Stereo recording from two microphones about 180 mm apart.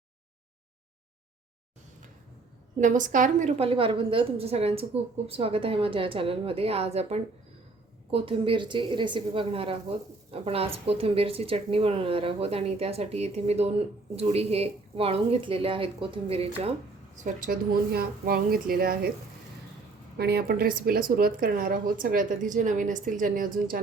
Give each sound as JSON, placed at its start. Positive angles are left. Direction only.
{"t": 2.8, "sound": "a woman's voice", "side_deg": -45}
{"t": 17.2, "sound": "a woman's voice", "side_deg": -50}
{"t": 20.1, "sound": "speech", "side_deg": -60}